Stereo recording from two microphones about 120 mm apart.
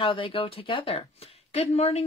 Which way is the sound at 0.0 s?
45° left (ahead or behind).